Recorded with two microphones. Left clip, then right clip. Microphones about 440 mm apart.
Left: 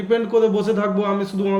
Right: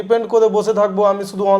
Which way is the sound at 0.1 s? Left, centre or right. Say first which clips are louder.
Right 4 dB; right.